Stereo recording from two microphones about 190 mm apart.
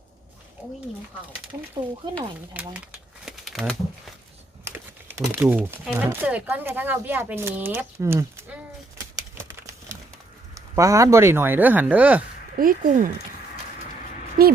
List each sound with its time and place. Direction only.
1.8 s speech: 10° right (ahead or behind)
3.2 s typewriter: centre (ahead or behind)
4.6 s speech: 10° right (ahead or behind)
10.5 s speech: 15° right (ahead or behind)
12.5 s speech: 50° right (ahead or behind)
14.4 s a woman's voice: 45° right (ahead or behind)